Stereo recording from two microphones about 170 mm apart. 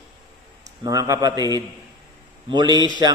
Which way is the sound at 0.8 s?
20° right (ahead or behind).